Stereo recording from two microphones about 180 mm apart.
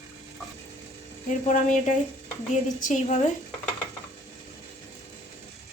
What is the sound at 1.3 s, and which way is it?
A woman's voice, 45° left (ahead or behind).